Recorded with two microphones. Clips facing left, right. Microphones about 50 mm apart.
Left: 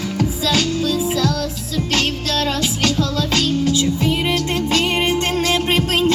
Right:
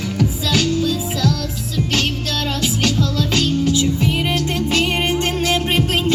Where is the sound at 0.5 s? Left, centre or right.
Right.